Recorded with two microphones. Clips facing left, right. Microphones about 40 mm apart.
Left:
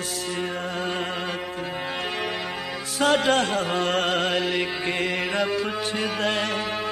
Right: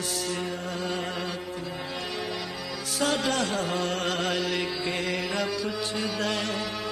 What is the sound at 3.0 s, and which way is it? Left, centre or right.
Music, left.